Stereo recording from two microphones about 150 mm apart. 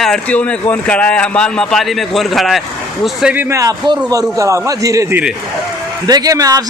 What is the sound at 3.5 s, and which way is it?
A man's voice, 20° right (ahead or behind).